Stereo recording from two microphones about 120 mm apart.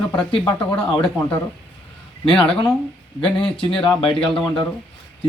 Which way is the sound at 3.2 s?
45° left (ahead or behind).